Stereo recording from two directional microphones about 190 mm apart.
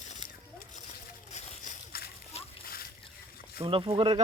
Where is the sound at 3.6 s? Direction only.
25° right (ahead or behind).